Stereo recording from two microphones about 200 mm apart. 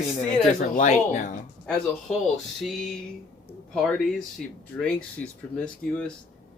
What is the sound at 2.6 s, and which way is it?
Speech, centre (ahead or behind).